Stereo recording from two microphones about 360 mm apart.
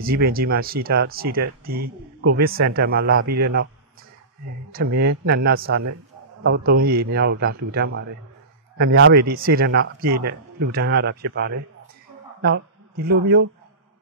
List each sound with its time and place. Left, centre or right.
0.0 s speech: right
4.9 s speech: right